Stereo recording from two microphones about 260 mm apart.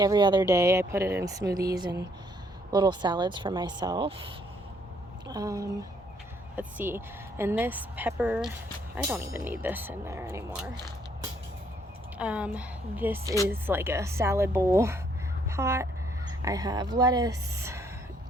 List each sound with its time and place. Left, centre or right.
0.0 s a woman's voice: centre
5.3 s a woman's voice: centre
12.1 s a woman's voice: centre